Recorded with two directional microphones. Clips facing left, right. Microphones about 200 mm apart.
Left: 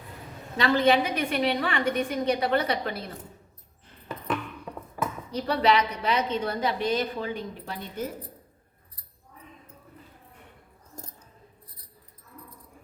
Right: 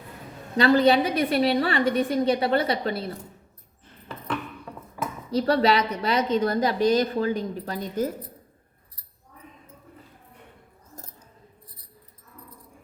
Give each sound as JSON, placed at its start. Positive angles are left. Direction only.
{"t": 0.5, "sound": "a woman's voice", "side_deg": -35}
{"t": 5.3, "sound": "a woman's voice", "side_deg": -35}